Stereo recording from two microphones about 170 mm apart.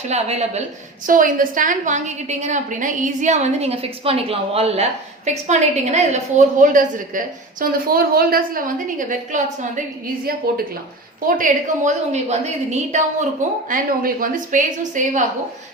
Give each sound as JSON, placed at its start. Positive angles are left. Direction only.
{"t": 0.1, "sound": "a woman's voice", "side_deg": -40}
{"t": 1.0, "sound": "a woman's voice", "side_deg": -50}
{"t": 10.4, "sound": "speech", "side_deg": -60}
{"t": 11.3, "sound": "a woman's voice", "side_deg": -50}
{"t": 13.7, "sound": "a woman's voice", "side_deg": -55}